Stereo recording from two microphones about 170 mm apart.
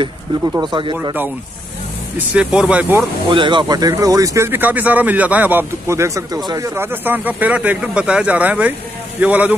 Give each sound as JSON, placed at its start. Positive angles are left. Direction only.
{"t": 0.6, "sound": "speech", "side_deg": -30}
{"t": 2.1, "sound": "speech", "side_deg": -5}
{"t": 3.3, "sound": "speech", "side_deg": -25}